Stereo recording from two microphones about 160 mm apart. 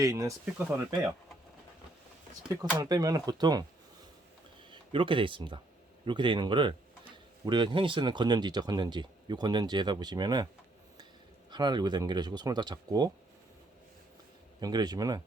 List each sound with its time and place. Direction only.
0.0 s speech: 20° right (ahead or behind)
2.5 s speech: 20° right (ahead or behind)
4.7 s speech: 30° right (ahead or behind)
11.5 s speech: 25° right (ahead or behind)
14.6 s speech: 25° right (ahead or behind)